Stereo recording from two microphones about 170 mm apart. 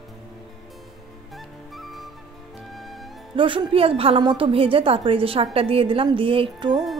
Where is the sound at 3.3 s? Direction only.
30° right (ahead or behind).